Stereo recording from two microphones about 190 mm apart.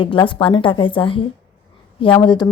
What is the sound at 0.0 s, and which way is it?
A woman's voice, 25° left (ahead or behind).